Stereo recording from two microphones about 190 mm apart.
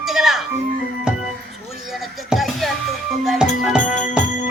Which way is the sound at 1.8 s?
Centre (ahead or behind).